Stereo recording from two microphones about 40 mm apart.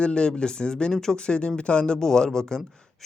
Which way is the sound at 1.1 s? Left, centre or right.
Left.